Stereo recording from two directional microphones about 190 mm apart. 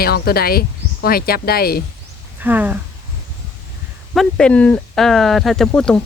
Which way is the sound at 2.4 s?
10° right (ahead or behind).